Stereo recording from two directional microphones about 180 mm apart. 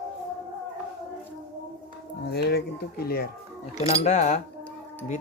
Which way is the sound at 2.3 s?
65° left (ahead or behind).